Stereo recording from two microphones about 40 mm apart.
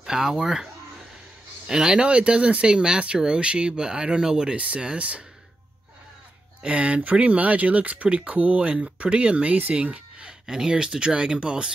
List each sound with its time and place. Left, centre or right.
0.0 s speech: centre
1.7 s speech: centre
4.6 s speech: right
6.6 s speech: right
10.4 s speech: centre